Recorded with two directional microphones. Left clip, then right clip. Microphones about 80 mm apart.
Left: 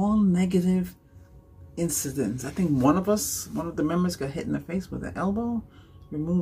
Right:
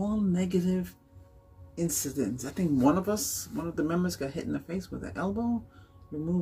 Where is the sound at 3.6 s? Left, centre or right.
Right.